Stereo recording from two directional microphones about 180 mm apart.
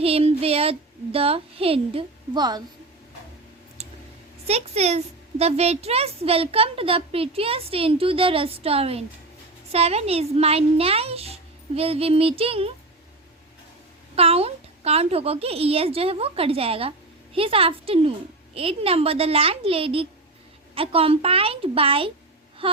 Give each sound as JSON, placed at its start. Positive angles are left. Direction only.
{"t": 0.0, "sound": "speech", "side_deg": -35}
{"t": 4.4, "sound": "speech", "side_deg": -35}
{"t": 14.2, "sound": "speech", "side_deg": -35}
{"t": 22.6, "sound": "a sound", "side_deg": -30}